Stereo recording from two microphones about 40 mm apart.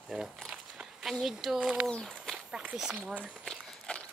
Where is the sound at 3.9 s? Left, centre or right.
Left.